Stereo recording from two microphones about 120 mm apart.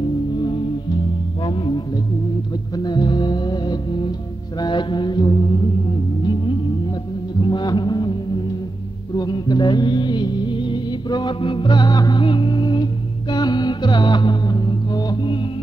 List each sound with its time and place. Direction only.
0.4 s music: 40° left (ahead or behind)
4.6 s mantra: 40° left (ahead or behind)
7.3 s mantra: 40° left (ahead or behind)
9.1 s music: 35° left (ahead or behind)